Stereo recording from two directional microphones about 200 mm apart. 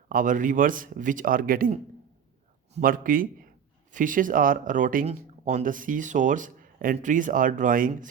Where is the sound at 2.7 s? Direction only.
45° right (ahead or behind).